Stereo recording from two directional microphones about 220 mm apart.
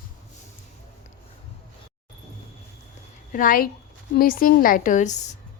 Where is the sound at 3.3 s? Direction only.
40° left (ahead or behind).